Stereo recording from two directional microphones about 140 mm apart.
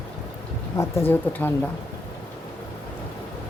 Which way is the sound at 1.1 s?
15° left (ahead or behind).